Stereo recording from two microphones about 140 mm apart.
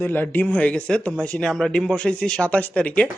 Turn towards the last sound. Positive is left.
turn(degrees=10)  # may be behind; listen again after turning